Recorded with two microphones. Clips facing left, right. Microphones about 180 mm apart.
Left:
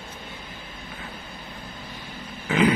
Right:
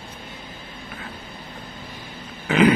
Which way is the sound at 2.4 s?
70° right (ahead or behind).